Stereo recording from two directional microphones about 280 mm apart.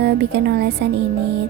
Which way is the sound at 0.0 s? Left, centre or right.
Right.